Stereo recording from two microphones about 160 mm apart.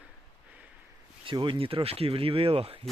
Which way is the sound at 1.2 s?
30° right (ahead or behind).